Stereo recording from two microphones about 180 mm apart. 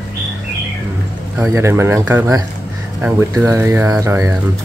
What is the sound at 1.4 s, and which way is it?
Speech, 15° right (ahead or behind).